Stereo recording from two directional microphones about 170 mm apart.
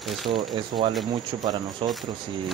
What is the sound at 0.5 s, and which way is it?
Speech, 30° right (ahead or behind).